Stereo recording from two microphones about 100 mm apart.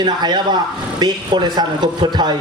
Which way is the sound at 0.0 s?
45° right (ahead or behind).